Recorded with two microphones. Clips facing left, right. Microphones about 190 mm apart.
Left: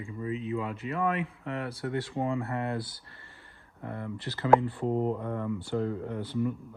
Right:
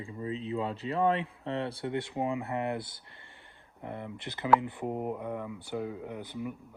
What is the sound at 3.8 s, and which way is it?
Speech, 20° right (ahead or behind).